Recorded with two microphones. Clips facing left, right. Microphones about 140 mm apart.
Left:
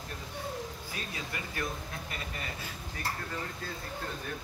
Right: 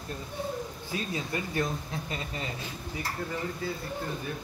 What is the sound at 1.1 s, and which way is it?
Speech, 25° right (ahead or behind).